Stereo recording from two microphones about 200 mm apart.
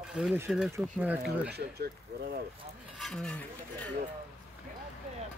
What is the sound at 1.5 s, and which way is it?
Speech, 55° right (ahead or behind).